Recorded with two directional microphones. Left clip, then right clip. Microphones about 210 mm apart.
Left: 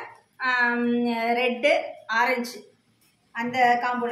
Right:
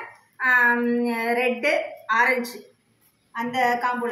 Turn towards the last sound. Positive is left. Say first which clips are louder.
# left 1 dB
turn(degrees=5)  # may be behind; listen again after turning